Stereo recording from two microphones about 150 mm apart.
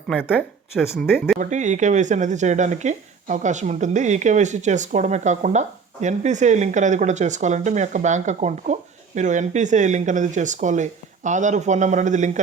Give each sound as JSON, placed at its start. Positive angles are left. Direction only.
{"t": 0.7, "sound": "speech", "side_deg": 0}
{"t": 1.4, "sound": "speech", "side_deg": -55}